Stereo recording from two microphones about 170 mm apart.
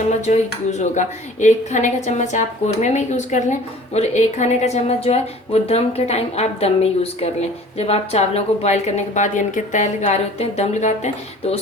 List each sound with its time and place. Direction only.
0.2 s a woman's voice: 40° left (ahead or behind)